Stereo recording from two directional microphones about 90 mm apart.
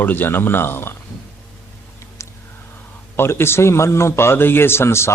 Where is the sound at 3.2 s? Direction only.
25° left (ahead or behind).